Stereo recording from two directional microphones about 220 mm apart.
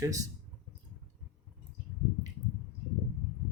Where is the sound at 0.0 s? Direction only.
15° right (ahead or behind).